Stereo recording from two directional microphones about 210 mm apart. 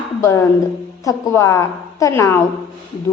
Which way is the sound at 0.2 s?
15° left (ahead or behind).